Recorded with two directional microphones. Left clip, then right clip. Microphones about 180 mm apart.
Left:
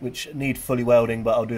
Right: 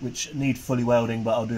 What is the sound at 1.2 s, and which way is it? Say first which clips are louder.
Speech: left 3 dB; 10° left (ahead or behind).